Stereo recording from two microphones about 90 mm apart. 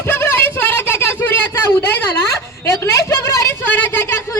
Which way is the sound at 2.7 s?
30° left (ahead or behind).